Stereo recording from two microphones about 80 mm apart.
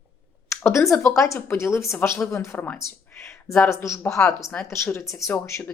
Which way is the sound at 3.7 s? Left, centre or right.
Left.